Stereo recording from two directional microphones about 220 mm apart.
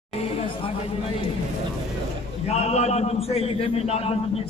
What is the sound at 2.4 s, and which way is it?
A man's voice, 30° left (ahead or behind).